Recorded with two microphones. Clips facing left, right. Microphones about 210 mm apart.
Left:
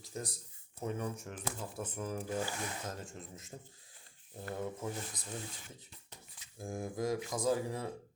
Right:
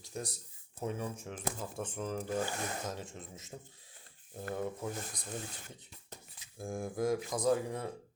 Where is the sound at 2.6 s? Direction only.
45° right (ahead or behind).